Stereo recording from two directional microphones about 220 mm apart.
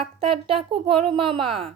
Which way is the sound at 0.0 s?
25° right (ahead or behind).